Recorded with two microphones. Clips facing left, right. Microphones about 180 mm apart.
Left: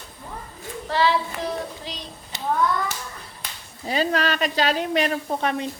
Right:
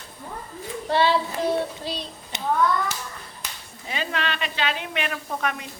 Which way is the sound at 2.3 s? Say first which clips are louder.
Even; 20° right (ahead or behind).